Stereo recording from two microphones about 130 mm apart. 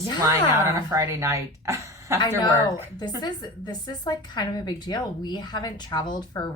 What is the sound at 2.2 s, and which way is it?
Speech, 30° left (ahead or behind).